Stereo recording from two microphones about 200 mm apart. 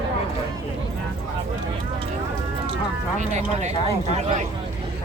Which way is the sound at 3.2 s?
35° right (ahead or behind).